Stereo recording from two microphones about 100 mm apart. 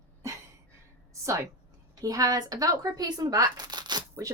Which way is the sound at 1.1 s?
30° right (ahead or behind).